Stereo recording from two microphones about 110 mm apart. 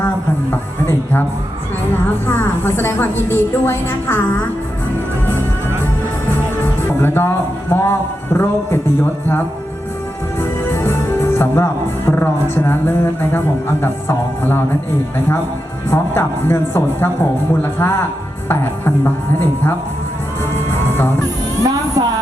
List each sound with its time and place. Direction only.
0.5 s a sound: 20° left (ahead or behind)
2.2 s a woman's voice: 20° left (ahead or behind)
6.8 s speech: 20° left (ahead or behind)
10.8 s a woman's voice: 20° left (ahead or behind)
15.9 s a woman's voice: 20° left (ahead or behind)
18.4 s chopping: 20° left (ahead or behind)
21.6 s music: 35° right (ahead or behind)